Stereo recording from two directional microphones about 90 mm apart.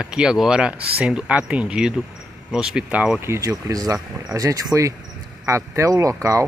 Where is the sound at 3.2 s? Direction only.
30° right (ahead or behind).